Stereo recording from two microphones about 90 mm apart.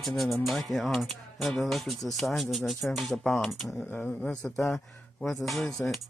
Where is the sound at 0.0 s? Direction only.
Centre (ahead or behind).